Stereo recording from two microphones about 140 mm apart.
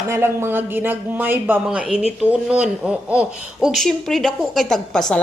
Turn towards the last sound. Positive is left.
turn(degrees=5)  # may be behind; listen again after turning